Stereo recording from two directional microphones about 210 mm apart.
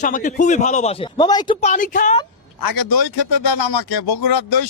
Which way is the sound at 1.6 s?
35° left (ahead or behind).